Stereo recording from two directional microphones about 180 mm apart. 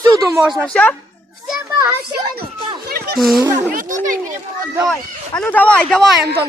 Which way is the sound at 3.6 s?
45° right (ahead or behind).